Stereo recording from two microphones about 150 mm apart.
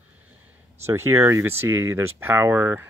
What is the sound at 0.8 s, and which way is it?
Speech, 15° right (ahead or behind).